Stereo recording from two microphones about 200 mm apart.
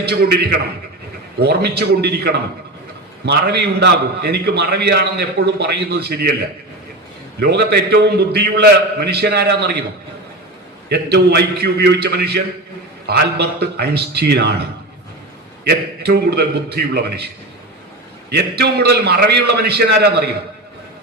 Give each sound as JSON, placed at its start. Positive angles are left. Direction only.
{"t": 0.0, "sound": "a man's voice", "side_deg": -50}
{"t": 7.3, "sound": "a man's voice", "side_deg": -55}
{"t": 10.8, "sound": "a man's voice", "side_deg": -55}
{"t": 15.6, "sound": "a man's voice", "side_deg": -50}